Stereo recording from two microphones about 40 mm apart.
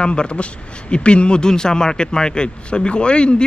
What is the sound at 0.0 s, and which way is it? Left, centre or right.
Speech, left.